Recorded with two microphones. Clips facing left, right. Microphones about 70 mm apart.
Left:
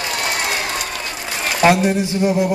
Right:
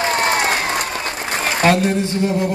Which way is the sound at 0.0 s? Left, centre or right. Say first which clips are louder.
Right 5 dB; right.